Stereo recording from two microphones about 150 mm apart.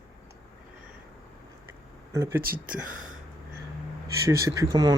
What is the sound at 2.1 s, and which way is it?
Speech, 15° right (ahead or behind).